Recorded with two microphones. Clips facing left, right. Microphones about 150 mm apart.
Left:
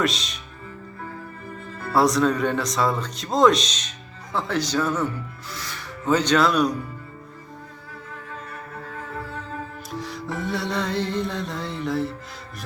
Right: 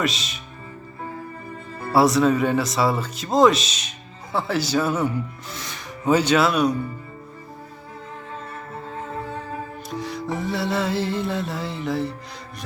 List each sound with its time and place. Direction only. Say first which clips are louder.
0.0 s speech: left 1 dB; centre (ahead or behind)
1.8 s speech: right 2 dB; 5° right (ahead or behind)
5.5 s rub: right 1 dB; 20° right (ahead or behind); by 6.7 s centre (ahead or behind)
9.1 s music: right 2 dB; 20° right (ahead or behind)
9.9 s music: right 4 dB; centre (ahead or behind)
10.4 s speech: right 2 dB; centre (ahead or behind)